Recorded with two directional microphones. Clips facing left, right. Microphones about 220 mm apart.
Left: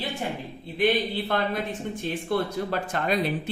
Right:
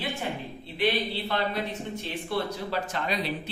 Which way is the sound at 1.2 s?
50° left (ahead or behind).